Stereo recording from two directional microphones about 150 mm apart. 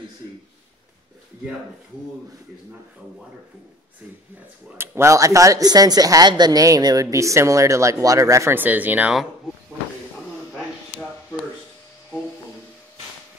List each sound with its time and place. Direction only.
4.7 s speech: 15° right (ahead or behind)